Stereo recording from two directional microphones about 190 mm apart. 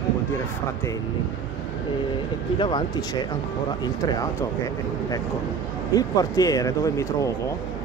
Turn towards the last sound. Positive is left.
turn(degrees=15)  # may be behind; listen again after turning